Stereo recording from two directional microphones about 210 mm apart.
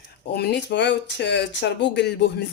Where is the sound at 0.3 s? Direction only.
50° left (ahead or behind).